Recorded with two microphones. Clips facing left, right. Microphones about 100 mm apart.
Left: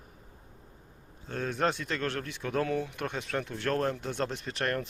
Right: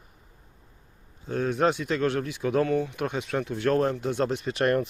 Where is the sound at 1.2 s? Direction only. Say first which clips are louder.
Right 6 dB; 5° right (ahead or behind).